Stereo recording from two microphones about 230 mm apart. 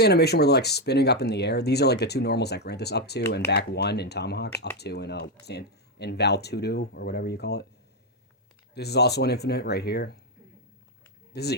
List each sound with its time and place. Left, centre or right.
0.0 s speech: left
8.7 s speech: left
11.3 s speech: left